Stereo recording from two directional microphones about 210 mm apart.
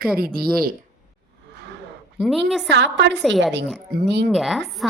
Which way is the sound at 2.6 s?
55° right (ahead or behind).